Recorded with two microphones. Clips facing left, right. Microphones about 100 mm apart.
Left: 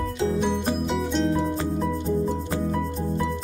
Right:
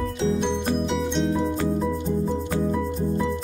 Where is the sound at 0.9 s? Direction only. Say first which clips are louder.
Even; centre (ahead or behind).